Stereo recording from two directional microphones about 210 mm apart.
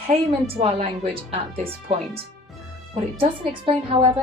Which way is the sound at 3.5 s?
25° right (ahead or behind).